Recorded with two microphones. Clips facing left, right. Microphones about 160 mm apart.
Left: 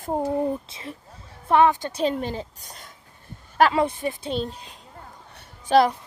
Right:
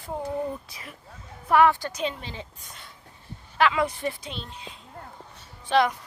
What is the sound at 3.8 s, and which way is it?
Speech, 20° left (ahead or behind).